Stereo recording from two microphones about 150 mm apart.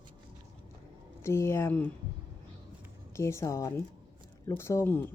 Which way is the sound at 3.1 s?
20° left (ahead or behind).